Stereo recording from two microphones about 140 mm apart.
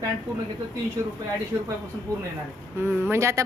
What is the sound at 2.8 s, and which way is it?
Speech, 20° right (ahead or behind).